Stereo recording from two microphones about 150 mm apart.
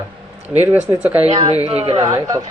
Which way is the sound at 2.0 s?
25° right (ahead or behind).